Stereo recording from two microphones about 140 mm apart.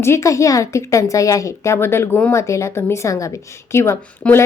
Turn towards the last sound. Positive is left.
turn(degrees=20)  # may be behind; listen again after turning